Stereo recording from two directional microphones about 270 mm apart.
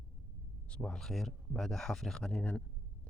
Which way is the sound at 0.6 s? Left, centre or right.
Centre.